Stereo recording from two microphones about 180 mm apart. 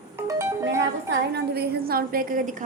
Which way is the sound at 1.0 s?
65° right (ahead or behind).